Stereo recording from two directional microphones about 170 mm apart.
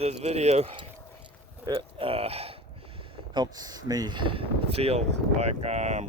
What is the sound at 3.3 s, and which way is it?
Speech, 25° right (ahead or behind).